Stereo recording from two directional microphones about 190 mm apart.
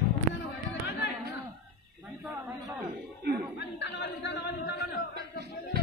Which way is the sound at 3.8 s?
65° left (ahead or behind).